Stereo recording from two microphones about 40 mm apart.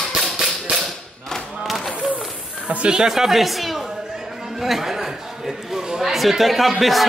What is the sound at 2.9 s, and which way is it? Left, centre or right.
A man's voice, centre.